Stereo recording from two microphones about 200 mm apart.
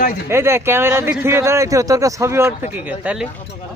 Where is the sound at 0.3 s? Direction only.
10° right (ahead or behind).